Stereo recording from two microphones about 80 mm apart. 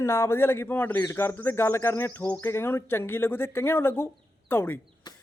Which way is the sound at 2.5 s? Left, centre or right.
Left.